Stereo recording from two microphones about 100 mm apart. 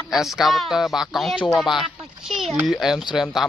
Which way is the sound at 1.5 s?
Centre (ahead or behind).